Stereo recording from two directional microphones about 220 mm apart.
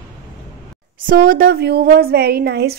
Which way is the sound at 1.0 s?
40° right (ahead or behind).